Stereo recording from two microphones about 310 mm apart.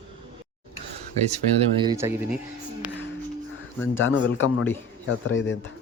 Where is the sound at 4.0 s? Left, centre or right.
Left.